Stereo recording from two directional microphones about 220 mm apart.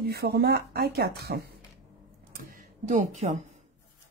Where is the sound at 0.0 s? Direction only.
45° right (ahead or behind).